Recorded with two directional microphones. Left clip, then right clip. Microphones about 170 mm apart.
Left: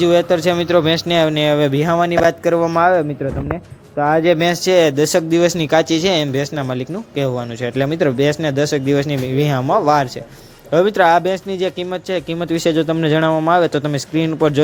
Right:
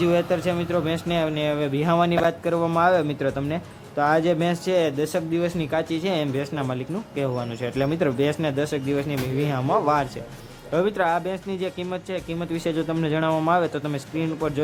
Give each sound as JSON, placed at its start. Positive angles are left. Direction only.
{"t": 0.0, "sound": "speech", "side_deg": 30}
{"t": 2.7, "sound": "speech", "side_deg": 10}